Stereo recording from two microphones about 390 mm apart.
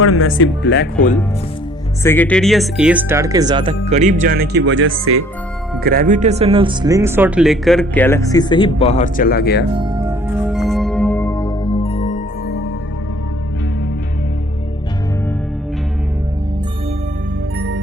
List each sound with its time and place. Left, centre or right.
0.0 s speech: left
2.0 s speech: centre; by 9.6 s left
9.7 s music: centre; by 12.6 s left